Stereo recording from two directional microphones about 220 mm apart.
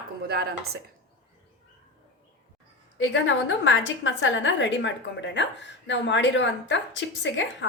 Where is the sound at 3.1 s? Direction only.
60° left (ahead or behind).